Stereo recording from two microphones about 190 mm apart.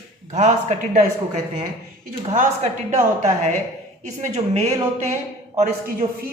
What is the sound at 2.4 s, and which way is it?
A man's voice, 35° right (ahead or behind).